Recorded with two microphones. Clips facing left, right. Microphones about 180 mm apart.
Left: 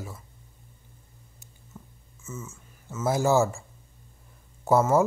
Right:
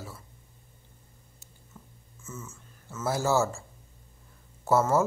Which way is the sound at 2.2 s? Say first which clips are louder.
Left 3 dB; 10° left (ahead or behind).